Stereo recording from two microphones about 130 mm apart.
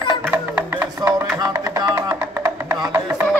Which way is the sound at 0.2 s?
15° right (ahead or behind).